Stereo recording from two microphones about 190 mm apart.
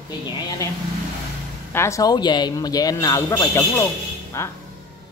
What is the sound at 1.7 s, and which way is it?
A man's voice, 15° left (ahead or behind).